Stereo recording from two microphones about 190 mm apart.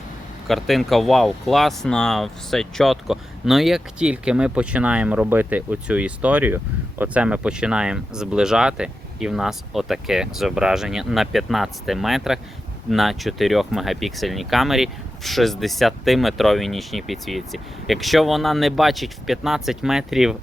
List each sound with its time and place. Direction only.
0.4 s speech: centre (ahead or behind)